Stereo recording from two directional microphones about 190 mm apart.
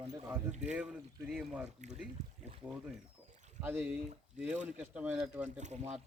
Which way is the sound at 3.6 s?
10° right (ahead or behind).